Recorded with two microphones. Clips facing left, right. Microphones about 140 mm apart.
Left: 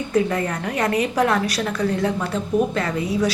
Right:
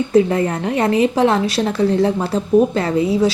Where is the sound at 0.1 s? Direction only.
30° right (ahead or behind).